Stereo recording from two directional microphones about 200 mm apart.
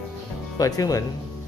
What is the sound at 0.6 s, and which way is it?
Speech, 15° left (ahead or behind).